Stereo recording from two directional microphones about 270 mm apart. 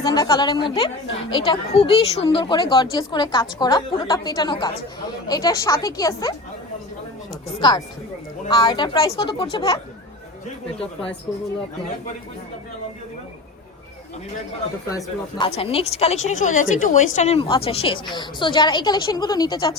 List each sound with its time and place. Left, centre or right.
0.0 s speech: centre
7.6 s speech: centre
14.8 s a woman's voice: centre